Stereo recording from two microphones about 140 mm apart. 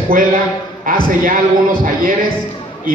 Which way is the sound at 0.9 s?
80° right.